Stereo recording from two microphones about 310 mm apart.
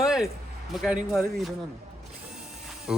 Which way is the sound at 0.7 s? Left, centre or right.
Centre.